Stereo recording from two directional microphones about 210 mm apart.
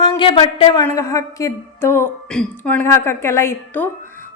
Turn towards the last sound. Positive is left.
turn(degrees=10)  # may be behind; listen again after turning